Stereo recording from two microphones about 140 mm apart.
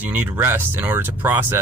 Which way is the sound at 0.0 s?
10° right (ahead or behind).